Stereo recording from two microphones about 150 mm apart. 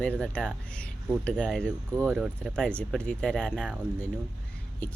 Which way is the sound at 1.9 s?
15° right (ahead or behind).